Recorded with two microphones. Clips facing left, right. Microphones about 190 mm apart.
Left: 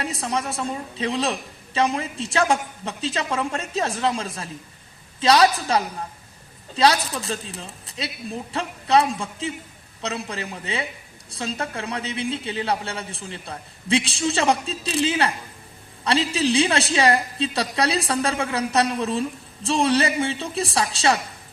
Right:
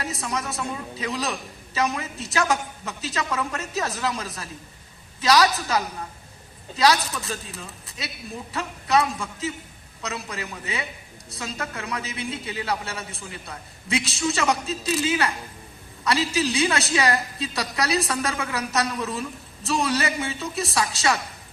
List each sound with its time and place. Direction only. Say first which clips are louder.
0.0 s a woman's voice: left 3 dB; 30° left (ahead or behind)